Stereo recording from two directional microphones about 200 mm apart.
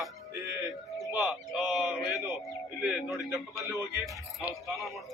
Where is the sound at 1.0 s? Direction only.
Centre (ahead or behind).